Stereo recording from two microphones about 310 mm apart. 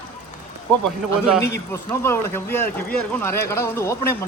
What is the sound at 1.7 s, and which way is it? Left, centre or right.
Speech, centre.